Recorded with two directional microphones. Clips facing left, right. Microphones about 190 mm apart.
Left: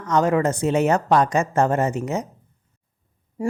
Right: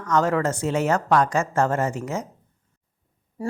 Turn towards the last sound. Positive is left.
turn(degrees=15)  # may be behind; listen again after turning